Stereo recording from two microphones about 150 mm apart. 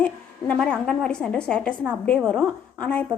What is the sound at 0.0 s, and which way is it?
A woman's voice, 10° left (ahead or behind).